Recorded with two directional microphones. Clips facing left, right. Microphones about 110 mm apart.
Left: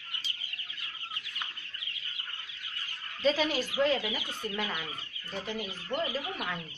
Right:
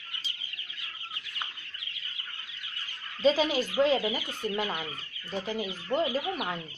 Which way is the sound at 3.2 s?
35° right (ahead or behind).